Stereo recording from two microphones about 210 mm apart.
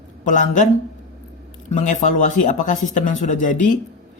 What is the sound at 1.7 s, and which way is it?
Speech, 35° left (ahead or behind).